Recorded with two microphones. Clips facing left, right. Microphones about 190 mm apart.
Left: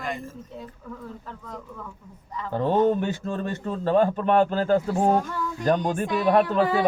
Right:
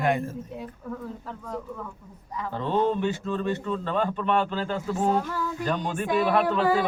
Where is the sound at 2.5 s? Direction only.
45° left (ahead or behind).